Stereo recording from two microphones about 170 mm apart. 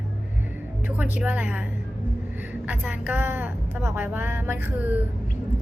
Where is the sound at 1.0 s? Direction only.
10° right (ahead or behind).